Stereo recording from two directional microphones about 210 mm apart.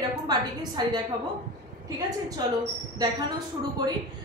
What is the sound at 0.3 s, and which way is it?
Speech, 20° right (ahead or behind).